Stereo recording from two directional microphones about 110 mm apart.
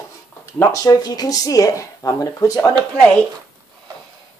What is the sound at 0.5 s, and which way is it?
Speech, 35° left (ahead or behind).